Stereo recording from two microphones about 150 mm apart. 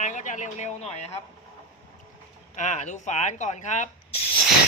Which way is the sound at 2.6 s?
55° left (ahead or behind).